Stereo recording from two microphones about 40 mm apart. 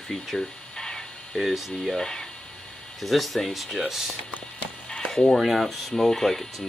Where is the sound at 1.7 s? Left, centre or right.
Centre.